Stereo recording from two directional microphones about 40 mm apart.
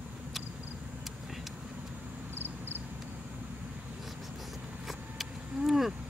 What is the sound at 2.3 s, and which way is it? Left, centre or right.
Cricket, left.